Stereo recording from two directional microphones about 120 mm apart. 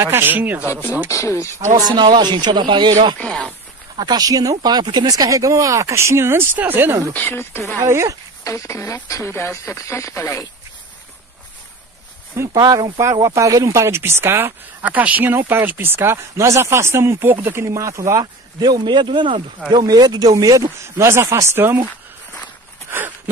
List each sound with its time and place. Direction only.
0.0 s a man's voice: 20° right (ahead or behind)
0.7 s speech: 20° left (ahead or behind)
1.8 s speech: 35° right (ahead or behind)
3.2 s speech: 10° left (ahead or behind)
3.9 s speech: 35° right (ahead or behind); by 7.0 s 15° right (ahead or behind)
7.2 s speech: 20° left (ahead or behind)
7.8 s speech: 25° right (ahead or behind)
8.5 s speech: 25° left (ahead or behind)
12.4 s speech: 30° right (ahead or behind)
22.8 s a sound: 15° right (ahead or behind)